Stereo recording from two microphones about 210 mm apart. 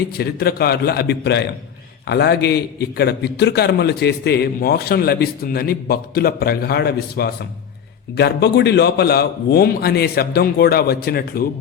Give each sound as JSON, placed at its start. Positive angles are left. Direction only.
{"t": 0.2, "sound": "a man's voice", "side_deg": 50}